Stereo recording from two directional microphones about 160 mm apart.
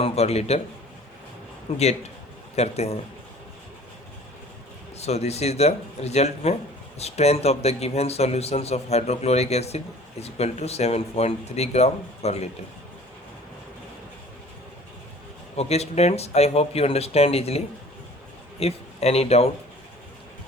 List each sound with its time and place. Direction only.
0.0 s a man's voice: 40° left (ahead or behind)
1.7 s a man's voice: 35° left (ahead or behind)
4.9 s a man's voice: 40° left (ahead or behind)
15.5 s a man's voice: 40° left (ahead or behind)
18.6 s a man's voice: 40° left (ahead or behind)